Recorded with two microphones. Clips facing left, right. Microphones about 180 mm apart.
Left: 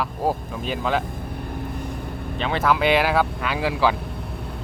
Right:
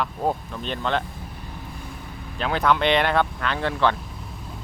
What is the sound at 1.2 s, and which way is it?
Vehicle, 55° left (ahead or behind).